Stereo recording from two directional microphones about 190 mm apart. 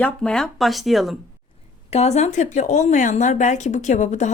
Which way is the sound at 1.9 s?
35° left (ahead or behind).